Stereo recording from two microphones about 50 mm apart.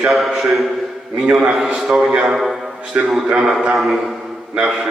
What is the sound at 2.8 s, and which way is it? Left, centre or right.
Speech, right.